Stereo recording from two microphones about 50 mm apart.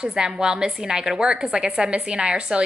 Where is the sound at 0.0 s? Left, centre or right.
Centre.